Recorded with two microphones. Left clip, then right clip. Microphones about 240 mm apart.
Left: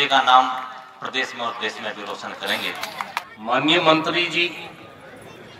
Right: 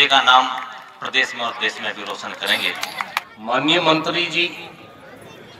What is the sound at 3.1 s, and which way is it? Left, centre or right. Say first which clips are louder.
A man's voice: even; right.